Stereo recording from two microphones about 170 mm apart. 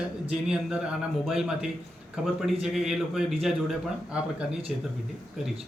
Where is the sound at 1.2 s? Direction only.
5° right (ahead or behind).